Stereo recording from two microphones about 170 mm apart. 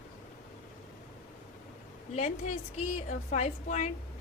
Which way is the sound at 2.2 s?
40° left (ahead or behind).